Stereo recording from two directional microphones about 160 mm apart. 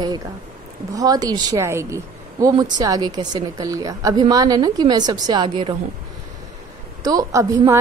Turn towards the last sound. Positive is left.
turn(degrees=-20)  # may be behind; listen again after turning